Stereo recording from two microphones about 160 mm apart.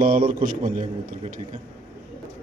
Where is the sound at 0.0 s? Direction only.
60° right (ahead or behind).